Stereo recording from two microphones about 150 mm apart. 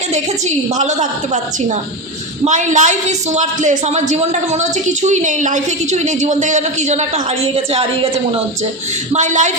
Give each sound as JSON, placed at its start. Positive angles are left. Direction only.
{"t": 0.8, "sound": "speech", "side_deg": -50}
{"t": 2.4, "sound": "speech", "side_deg": -55}
{"t": 9.1, "sound": "a woman's voice", "side_deg": -55}